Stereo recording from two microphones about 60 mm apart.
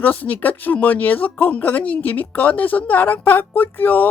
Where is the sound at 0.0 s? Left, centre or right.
Left.